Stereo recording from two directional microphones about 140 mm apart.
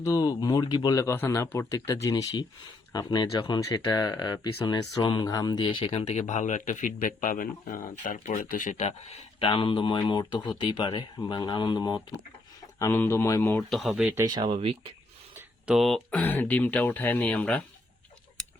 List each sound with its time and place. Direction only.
0.0 s speech: 25° left (ahead or behind); by 9.0 s 55° left (ahead or behind)
9.4 s speech: 40° left (ahead or behind)
12.8 s speech: 20° left (ahead or behind)
13.6 s speech: centre (ahead or behind)
14.2 s speech: 30° right (ahead or behind)
15.4 s a sound: 5° right (ahead or behind)
16.2 s speech: 15° left (ahead or behind)